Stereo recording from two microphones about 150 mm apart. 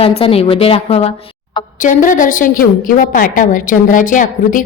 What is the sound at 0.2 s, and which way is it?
Speech, 40° left (ahead or behind).